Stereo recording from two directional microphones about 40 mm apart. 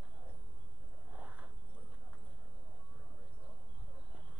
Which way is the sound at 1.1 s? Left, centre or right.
Right.